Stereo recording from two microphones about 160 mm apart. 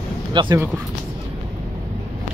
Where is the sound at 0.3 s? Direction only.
30° right (ahead or behind).